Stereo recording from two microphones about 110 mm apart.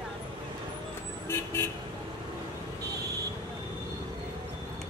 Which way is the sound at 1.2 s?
25° left (ahead or behind).